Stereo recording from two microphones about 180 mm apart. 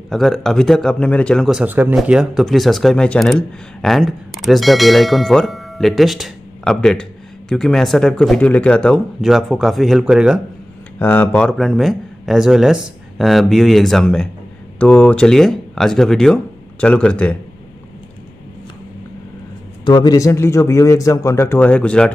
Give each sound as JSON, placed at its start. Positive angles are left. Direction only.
{"t": 0.1, "sound": "speech", "side_deg": 0}
{"t": 11.0, "sound": "speech", "side_deg": 10}
{"t": 19.8, "sound": "speech", "side_deg": 25}